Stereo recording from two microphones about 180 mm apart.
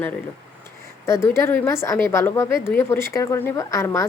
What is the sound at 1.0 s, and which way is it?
A woman's voice, 15° left (ahead or behind).